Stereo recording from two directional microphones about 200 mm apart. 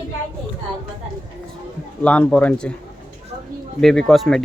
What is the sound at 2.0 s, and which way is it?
Speech, 5° left (ahead or behind).